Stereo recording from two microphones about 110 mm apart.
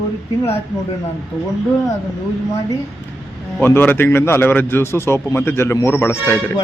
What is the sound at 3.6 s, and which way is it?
A man's voice, 20° left (ahead or behind).